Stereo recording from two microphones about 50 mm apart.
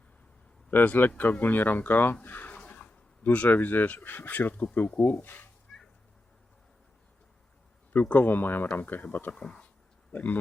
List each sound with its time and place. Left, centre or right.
0.9 s speech: left
2.2 s a sound: left
2.6 s speech: left
5.7 s cat: centre
7.9 s speech: left
9.3 s speech: centre
10.1 s speech: left